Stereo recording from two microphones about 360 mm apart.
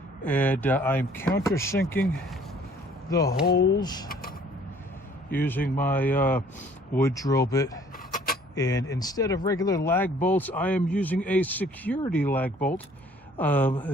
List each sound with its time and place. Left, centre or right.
0.3 s speech: centre
3.4 s speech: left
3.8 s speech: centre
4.1 s a sound: left
5.3 s speech: centre